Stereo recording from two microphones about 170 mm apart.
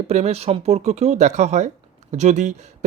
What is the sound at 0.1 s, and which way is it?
Speech, 40° right (ahead or behind).